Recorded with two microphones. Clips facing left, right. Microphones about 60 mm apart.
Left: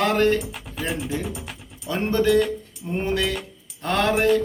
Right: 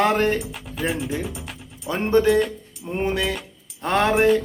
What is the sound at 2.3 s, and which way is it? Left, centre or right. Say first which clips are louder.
Speech: even; centre.